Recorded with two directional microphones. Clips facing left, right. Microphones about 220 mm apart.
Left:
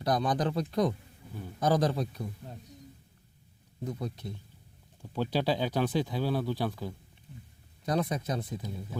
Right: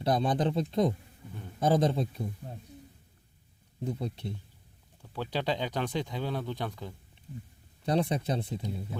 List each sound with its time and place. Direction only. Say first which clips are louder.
0.0 s speech: right 1 dB; 25° right (ahead or behind)
3.8 s speech: right 2 dB; 30° right (ahead or behind)
5.0 s speech: left 3 dB; 15° left (ahead or behind)
7.9 s speech: right 2 dB; 30° right (ahead or behind)